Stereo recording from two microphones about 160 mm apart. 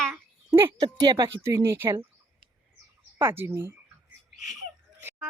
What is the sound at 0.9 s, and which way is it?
Speech, 30° right (ahead or behind).